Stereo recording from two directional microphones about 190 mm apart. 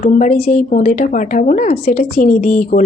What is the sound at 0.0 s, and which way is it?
Speech, 40° left (ahead or behind).